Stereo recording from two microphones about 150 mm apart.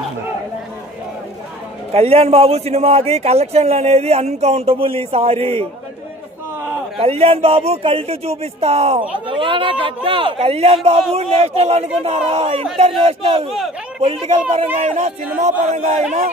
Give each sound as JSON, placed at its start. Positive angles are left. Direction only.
{"t": 1.9, "sound": "a man's voice", "side_deg": -45}
{"t": 7.0, "sound": "a man's voice", "side_deg": -40}